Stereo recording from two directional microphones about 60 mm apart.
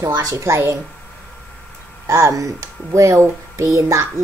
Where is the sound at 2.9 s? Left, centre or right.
Right.